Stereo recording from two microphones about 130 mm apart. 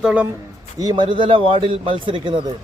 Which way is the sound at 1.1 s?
40° right (ahead or behind).